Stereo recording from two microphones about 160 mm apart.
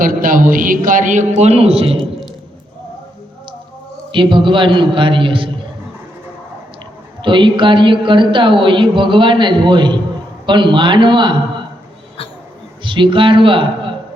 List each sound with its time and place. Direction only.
0.0 s a man's voice: 60° right (ahead or behind); by 2.0 s 35° right (ahead or behind)
4.1 s a man's voice: 30° right (ahead or behind)
7.2 s a man's voice: 30° right (ahead or behind)
12.8 s a man's voice: 30° right (ahead or behind)